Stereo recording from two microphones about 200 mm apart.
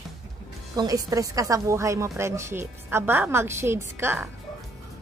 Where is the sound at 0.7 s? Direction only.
20° right (ahead or behind).